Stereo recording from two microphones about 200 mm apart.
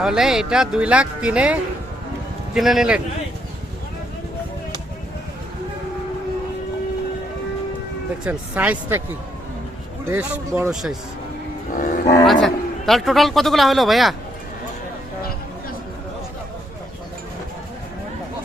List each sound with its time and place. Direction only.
0.0 s a man's voice: 5° right (ahead or behind)
2.6 s a man's voice: centre (ahead or behind)
8.2 s speech: 5° right (ahead or behind)
10.1 s speech: 10° right (ahead or behind)
11.8 s speech: 40° left (ahead or behind)
12.2 s a man's voice: centre (ahead or behind)